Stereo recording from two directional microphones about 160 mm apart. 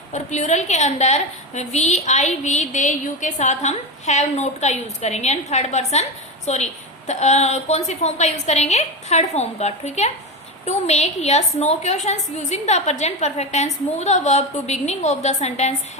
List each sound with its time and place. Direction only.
0.1 s a woman's voice: 45° left (ahead or behind)